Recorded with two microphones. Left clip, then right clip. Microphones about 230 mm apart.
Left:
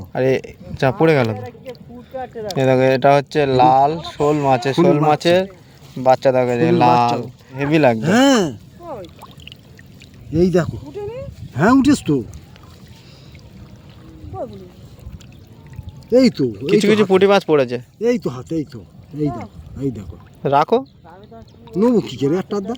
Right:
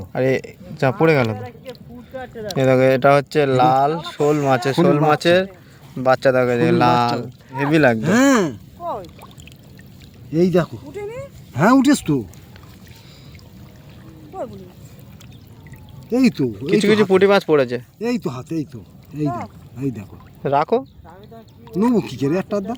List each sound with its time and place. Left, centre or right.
0.1 s speech: centre
2.1 s speech: right
2.6 s speech: centre
8.0 s speech: left
10.3 s speech: centre
16.1 s speech: centre
16.6 s speech: centre
20.4 s speech: centre
21.1 s speech: centre